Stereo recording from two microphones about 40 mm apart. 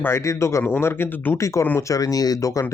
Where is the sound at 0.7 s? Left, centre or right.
Left.